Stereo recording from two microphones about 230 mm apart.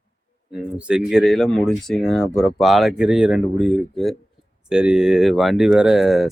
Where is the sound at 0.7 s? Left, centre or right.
Centre.